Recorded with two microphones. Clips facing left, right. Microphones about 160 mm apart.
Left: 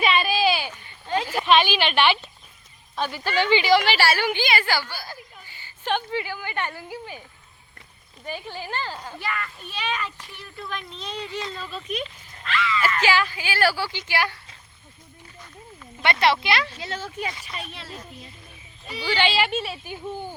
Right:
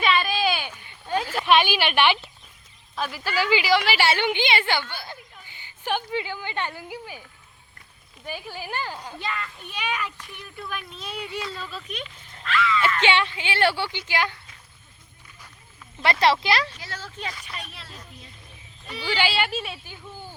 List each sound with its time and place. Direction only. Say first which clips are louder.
0.0 s a sound: left 2 dB; 10° left (ahead or behind)
0.7 s a sound: left 1 dB; 10° right (ahead or behind)
1.5 s a woman's voice: even; 10° right (ahead or behind)
2.9 s speech: left 2 dB; centre (ahead or behind)
3.9 s a woman's voice: even; 20° right (ahead or behind)
8.2 s a child's voice: left 1 dB; 5° right (ahead or behind)
11.5 s speech: left 4 dB; centre (ahead or behind)
13.1 s a woman's voice: even; 25° right (ahead or behind)
16.2 s speech: right 1 dB; 35° right (ahead or behind)
16.8 s speech: left 6 dB; 20° left (ahead or behind)
17.4 s speech: left 3 dB; centre (ahead or behind)